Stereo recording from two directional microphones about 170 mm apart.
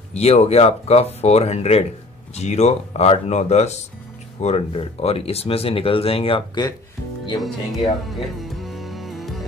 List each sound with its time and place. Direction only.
0.1 s speech: 35° left (ahead or behind); by 7.5 s 20° left (ahead or behind)
8.1 s music: centre (ahead or behind)